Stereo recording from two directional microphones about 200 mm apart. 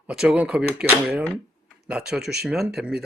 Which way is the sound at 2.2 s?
55° right (ahead or behind).